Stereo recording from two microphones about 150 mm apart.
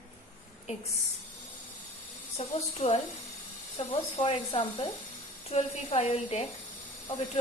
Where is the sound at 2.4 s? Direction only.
45° left (ahead or behind).